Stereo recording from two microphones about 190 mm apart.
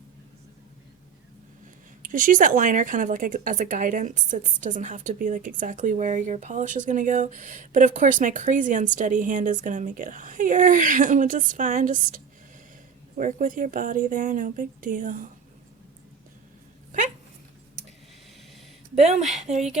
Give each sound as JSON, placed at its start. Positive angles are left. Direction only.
{"t": 2.0, "sound": "a woman's voice", "side_deg": -45}
{"t": 16.9, "sound": "a woman's voice", "side_deg": -45}
{"t": 18.9, "sound": "speech", "side_deg": -35}
{"t": 19.2, "sound": "speech", "side_deg": 0}
{"t": 19.5, "sound": "speech", "side_deg": -35}